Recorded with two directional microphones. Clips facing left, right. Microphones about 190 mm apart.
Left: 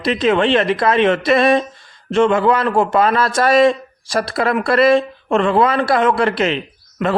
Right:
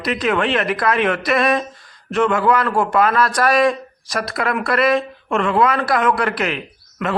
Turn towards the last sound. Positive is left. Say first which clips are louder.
# left 4 dB
turn(degrees=25)  # may be behind; listen again after turning